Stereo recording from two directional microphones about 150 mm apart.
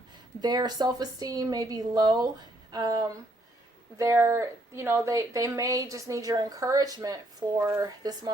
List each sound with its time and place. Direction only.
0.4 s speech: 25° right (ahead or behind)